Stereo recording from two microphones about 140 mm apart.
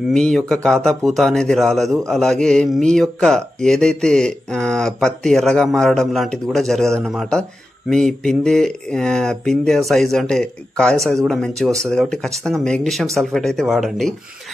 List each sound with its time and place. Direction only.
0.1 s a man's voice: 5° left (ahead or behind)